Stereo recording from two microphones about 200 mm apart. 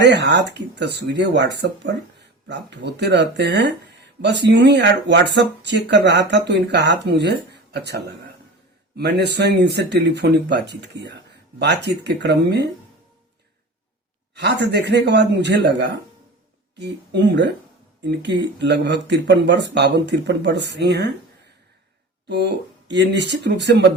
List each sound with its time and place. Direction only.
0.0 s speech: 60° right (ahead or behind)
14.3 s speech: 55° right (ahead or behind)
22.3 s speech: 55° right (ahead or behind)